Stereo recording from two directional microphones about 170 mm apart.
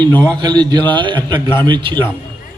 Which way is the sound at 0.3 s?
25° right (ahead or behind).